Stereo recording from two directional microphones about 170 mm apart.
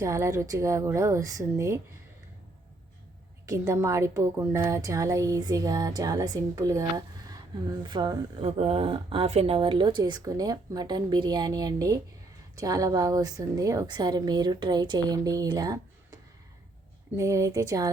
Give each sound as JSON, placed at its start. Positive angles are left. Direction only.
{"t": 0.0, "sound": "speech", "side_deg": -20}
{"t": 3.4, "sound": "a woman's voice", "side_deg": -20}
{"t": 8.4, "sound": "a woman's voice", "side_deg": -40}
{"t": 17.2, "sound": "a woman's voice", "side_deg": -20}